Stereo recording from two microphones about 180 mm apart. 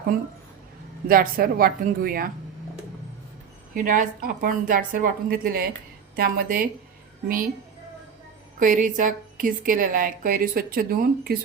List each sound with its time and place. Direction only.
1.0 s a woman's voice: 55° right (ahead or behind)
3.8 s a woman's voice: 45° right (ahead or behind)
8.5 s a woman's voice: 45° right (ahead or behind)